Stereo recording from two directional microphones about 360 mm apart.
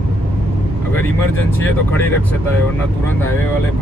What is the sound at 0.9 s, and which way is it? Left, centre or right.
Speech, centre.